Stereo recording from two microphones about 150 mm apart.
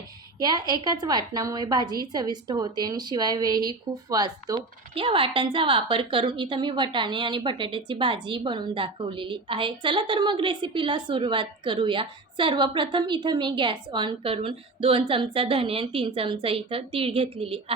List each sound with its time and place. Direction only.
0.3 s a woman's voice: 25° right (ahead or behind)